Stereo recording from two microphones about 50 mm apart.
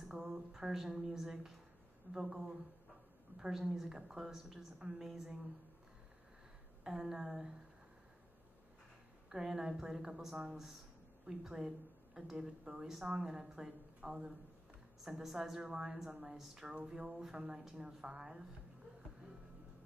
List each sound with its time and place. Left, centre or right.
0.1 s a woman's voice: centre
4.4 s speech: centre
4.7 s a woman's voice: centre
6.8 s a woman's voice: centre
9.3 s a woman's voice: centre